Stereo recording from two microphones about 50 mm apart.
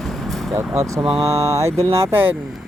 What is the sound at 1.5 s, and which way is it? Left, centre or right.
Speech, right.